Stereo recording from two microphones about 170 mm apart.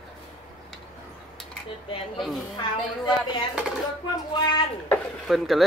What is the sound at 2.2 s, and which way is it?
Speech, centre (ahead or behind).